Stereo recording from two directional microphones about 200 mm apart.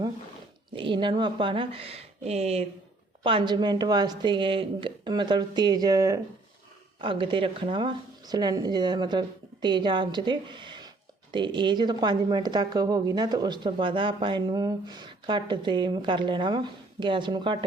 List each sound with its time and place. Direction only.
0.8 s speech: 25° right (ahead or behind)